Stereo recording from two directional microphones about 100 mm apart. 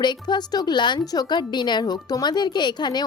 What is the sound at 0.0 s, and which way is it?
Speech, 45° left (ahead or behind).